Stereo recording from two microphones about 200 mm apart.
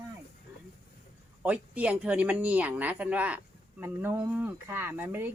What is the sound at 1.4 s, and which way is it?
Speech, 5° right (ahead or behind).